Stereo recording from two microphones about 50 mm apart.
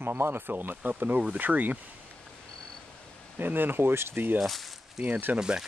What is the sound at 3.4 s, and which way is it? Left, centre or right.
Speech, right.